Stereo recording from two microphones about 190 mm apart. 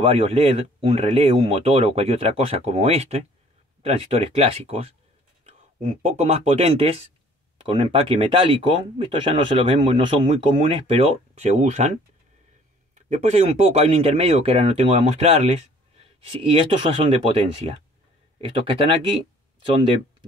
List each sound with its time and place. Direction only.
0.0 s speech: 30° right (ahead or behind)
12.9 s speech: 35° right (ahead or behind)
18.4 s speech: 25° right (ahead or behind)